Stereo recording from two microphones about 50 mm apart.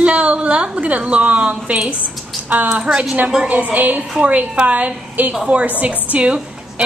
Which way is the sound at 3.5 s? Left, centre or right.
Right.